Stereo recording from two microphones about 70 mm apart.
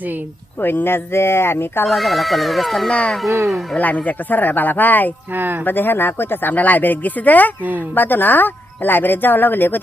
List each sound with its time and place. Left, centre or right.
0.6 s speech: left
1.9 s speech: centre
2.9 s speech: centre
3.2 s speech: right
3.8 s speech: left
5.3 s speech: right
5.6 s speech: left